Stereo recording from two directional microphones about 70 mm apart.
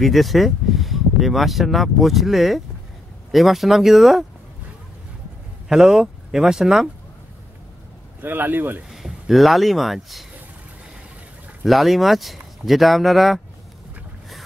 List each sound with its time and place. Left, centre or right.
0.0 s speech: centre
5.7 s speech: centre
8.2 s speech: right
8.9 s speech: centre
11.6 s speech: centre